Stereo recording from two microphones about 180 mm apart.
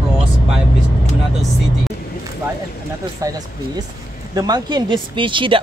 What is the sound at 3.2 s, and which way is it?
Speech, 20° right (ahead or behind).